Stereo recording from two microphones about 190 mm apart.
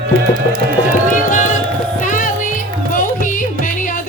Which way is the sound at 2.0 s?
45° left (ahead or behind).